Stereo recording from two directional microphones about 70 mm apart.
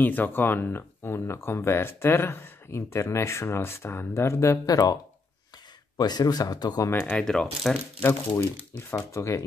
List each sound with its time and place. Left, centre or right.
0.0 s speech: left
4.6 s speech: left
5.9 s speech: left
6.9 s speech: left
7.2 s speech: centre
8.0 s speech: left